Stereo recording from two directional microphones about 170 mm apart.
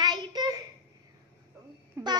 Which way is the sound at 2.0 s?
15° right (ahead or behind).